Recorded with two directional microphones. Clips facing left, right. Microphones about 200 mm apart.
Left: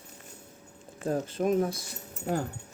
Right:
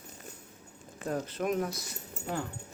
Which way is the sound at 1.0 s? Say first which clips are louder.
Left 4 dB; 30° left (ahead or behind).